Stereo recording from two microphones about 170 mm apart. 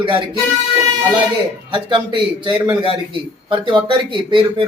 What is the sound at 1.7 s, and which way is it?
A man's voice, 30° right (ahead or behind).